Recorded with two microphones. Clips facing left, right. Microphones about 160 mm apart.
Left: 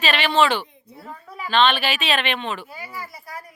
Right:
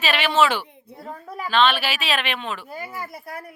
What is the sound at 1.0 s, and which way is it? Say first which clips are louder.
Speech: right 3 dB; 45° right (ahead or behind).